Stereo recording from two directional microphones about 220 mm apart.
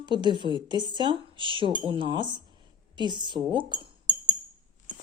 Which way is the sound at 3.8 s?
30° right (ahead or behind).